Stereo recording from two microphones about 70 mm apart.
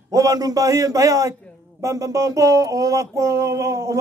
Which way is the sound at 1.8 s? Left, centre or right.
Right.